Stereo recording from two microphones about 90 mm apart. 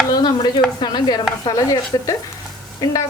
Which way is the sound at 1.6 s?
40° left (ahead or behind).